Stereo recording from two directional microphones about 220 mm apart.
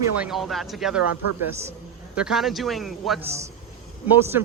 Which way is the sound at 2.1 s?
Centre (ahead or behind).